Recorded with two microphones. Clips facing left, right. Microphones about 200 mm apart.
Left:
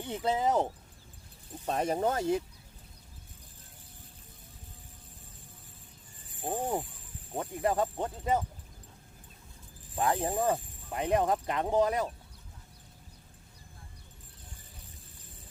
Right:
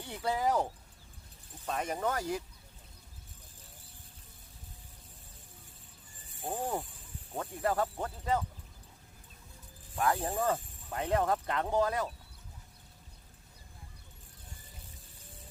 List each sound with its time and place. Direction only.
0.0 s speech: 20° left (ahead or behind)
1.6 s speech: 35° left (ahead or behind)
6.4 s speech: 20° left (ahead or behind)
9.9 s speech: 20° left (ahead or behind)